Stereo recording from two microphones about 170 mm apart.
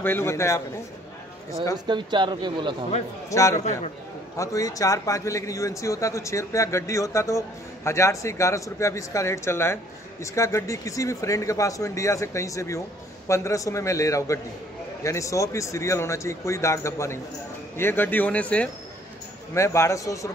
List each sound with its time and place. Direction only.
0.0 s a man's voice: 15° left (ahead or behind)
1.9 s speech: 25° right (ahead or behind)
3.3 s a man's voice: 20° left (ahead or behind)
3.5 s a man's voice: 40° left (ahead or behind)
4.4 s a man's voice: 20° left (ahead or behind)